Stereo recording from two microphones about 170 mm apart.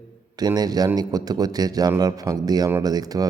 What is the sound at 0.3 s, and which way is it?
A man's voice, 25° right (ahead or behind).